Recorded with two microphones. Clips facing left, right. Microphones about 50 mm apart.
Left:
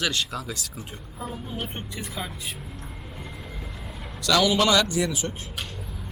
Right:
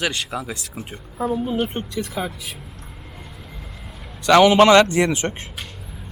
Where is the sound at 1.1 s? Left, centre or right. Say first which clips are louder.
Right 12 dB; right.